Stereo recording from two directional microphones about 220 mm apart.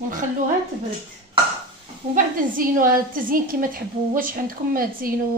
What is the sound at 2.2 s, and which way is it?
A woman's voice, 40° right (ahead or behind).